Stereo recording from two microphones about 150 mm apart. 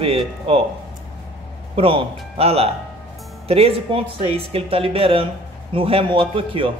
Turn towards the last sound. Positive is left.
turn(degrees=-35)  # may be behind; listen again after turning